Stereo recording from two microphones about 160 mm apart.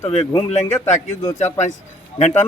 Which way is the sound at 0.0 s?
40° left (ahead or behind).